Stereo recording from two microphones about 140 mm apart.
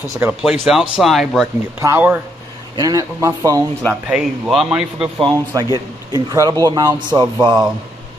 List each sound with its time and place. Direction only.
0.2 s speech: 5° right (ahead or behind)
1.8 s a man's voice: 15° right (ahead or behind)
2.7 s speech: 25° right (ahead or behind)
3.9 s a man's voice: 5° right (ahead or behind)
5.2 s speech: 25° right (ahead or behind)